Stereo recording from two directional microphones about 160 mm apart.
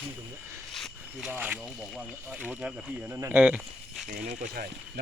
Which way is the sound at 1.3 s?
10° right (ahead or behind).